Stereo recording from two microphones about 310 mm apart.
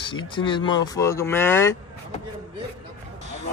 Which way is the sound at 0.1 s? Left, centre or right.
Centre.